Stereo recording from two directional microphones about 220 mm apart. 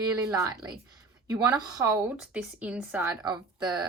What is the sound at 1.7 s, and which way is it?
Speech, 15° right (ahead or behind).